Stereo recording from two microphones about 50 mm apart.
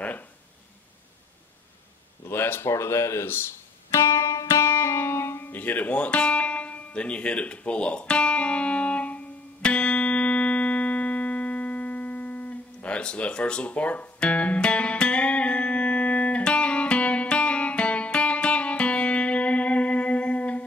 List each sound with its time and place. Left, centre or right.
0.0 s a sound: left
2.2 s a sound: left
2.7 s speech: left
3.9 s music: left
5.5 s speech: left
5.9 s speech: left
9.6 s music: left